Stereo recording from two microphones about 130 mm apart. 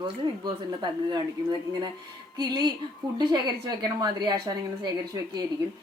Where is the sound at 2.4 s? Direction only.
35° right (ahead or behind).